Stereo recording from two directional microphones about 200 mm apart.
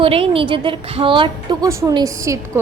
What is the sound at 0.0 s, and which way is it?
A woman's voice, 30° right (ahead or behind).